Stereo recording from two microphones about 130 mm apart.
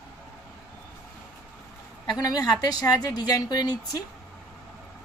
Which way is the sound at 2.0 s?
30° left (ahead or behind).